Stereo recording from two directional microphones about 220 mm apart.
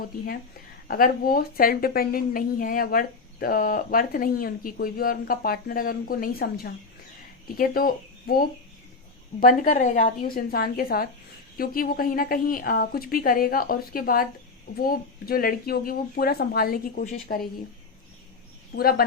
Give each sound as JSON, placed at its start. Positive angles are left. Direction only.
{"t": 0.9, "sound": "a woman's voice", "side_deg": 40}
{"t": 18.8, "sound": "speech", "side_deg": 45}